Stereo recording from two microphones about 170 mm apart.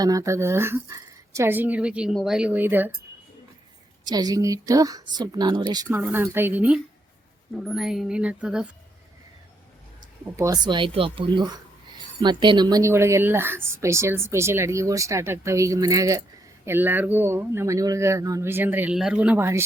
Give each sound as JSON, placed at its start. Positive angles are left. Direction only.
{"t": 0.0, "sound": "a woman's voice", "side_deg": -20}
{"t": 4.0, "sound": "a woman's voice", "side_deg": -20}
{"t": 10.3, "sound": "a woman's voice", "side_deg": -20}